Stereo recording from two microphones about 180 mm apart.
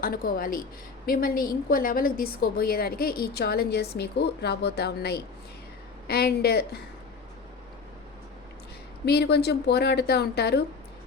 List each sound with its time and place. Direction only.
0.0 s a woman's voice: 55° left (ahead or behind)
9.0 s a woman's voice: 65° left (ahead or behind)